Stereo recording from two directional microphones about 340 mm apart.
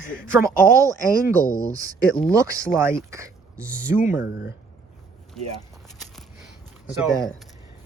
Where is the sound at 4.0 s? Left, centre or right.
Left.